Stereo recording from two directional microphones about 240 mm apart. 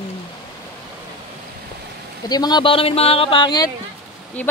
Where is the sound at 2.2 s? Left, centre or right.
Centre.